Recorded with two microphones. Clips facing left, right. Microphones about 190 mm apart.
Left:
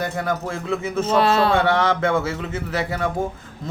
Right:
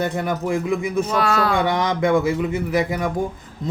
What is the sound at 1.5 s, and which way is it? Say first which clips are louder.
A man's voice: left 1 dB; 15° right (ahead or behind).